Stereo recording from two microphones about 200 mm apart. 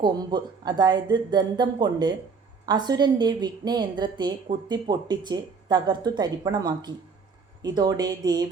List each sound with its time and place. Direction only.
0.0 s a woman's voice: 20° right (ahead or behind)